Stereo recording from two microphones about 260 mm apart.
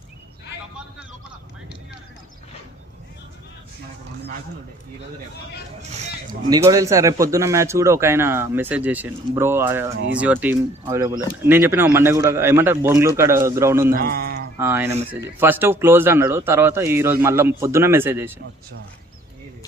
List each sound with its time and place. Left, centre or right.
6.5 s a man's voice: centre
13.9 s a man's voice: right
14.6 s a man's voice: centre